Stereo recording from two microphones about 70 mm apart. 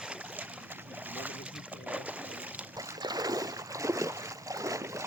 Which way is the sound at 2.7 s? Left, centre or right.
Right.